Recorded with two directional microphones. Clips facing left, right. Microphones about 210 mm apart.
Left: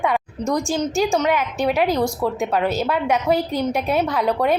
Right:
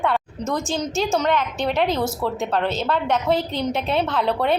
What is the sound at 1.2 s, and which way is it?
A woman's voice, 10° left (ahead or behind).